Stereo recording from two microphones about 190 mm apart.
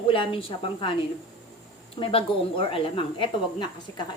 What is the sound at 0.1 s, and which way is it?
Speech, 25° left (ahead or behind).